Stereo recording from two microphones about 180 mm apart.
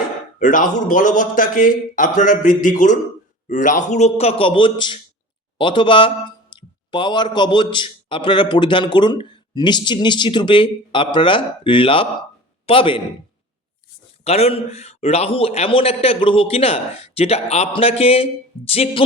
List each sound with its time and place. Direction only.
0.3 s a man's voice: 45° left (ahead or behind); by 13.0 s 30° left (ahead or behind)
14.3 s a man's voice: 35° left (ahead or behind)